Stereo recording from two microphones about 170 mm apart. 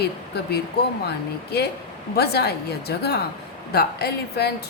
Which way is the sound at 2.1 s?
70° left (ahead or behind).